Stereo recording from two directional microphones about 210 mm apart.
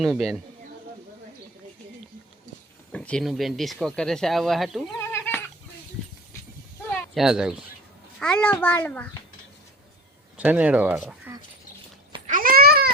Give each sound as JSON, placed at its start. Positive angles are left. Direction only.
{"t": 0.0, "sound": "speech", "side_deg": 0}
{"t": 2.9, "sound": "speech", "side_deg": 5}
{"t": 4.9, "sound": "goat", "side_deg": 10}
{"t": 7.1, "sound": "a child's voice", "side_deg": 0}
{"t": 10.3, "sound": "speech", "side_deg": -5}
{"t": 11.3, "sound": "a sound", "side_deg": -10}
{"t": 12.3, "sound": "goat", "side_deg": -40}